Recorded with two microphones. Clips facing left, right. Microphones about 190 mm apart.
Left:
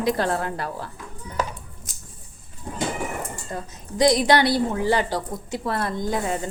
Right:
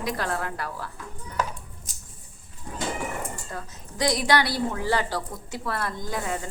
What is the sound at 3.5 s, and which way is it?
Speech, 20° left (ahead or behind).